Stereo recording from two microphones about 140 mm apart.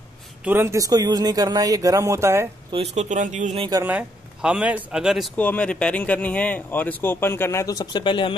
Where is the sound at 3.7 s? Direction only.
10° right (ahead or behind).